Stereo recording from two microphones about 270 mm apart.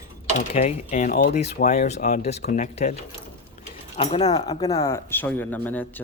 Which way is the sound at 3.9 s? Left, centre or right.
Left.